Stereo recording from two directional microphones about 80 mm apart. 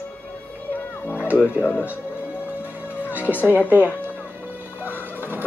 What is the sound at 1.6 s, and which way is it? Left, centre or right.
Speech, left.